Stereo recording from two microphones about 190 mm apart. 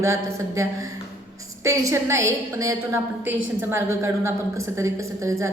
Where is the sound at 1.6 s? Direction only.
15° right (ahead or behind).